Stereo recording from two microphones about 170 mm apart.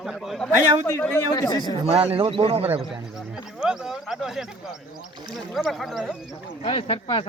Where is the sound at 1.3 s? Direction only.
25° left (ahead or behind).